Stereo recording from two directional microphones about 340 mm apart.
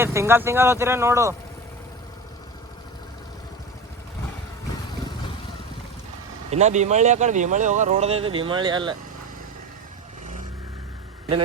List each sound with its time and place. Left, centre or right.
0.0 s speech: centre
6.5 s speech: centre